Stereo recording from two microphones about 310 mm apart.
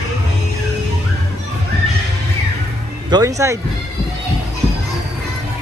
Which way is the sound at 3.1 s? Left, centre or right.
Centre.